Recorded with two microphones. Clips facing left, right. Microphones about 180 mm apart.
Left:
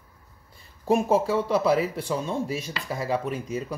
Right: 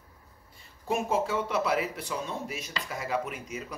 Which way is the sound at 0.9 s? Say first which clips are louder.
Left 7 dB; 35° left (ahead or behind).